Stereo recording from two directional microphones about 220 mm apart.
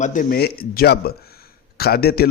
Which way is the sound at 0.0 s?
35° left (ahead or behind).